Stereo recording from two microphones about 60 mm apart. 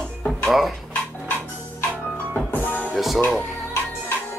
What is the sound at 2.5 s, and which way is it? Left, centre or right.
Music, left.